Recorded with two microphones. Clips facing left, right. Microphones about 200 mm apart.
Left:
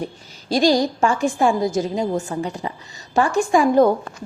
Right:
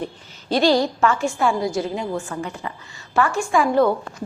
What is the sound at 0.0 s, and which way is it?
A woman's voice, 10° left (ahead or behind).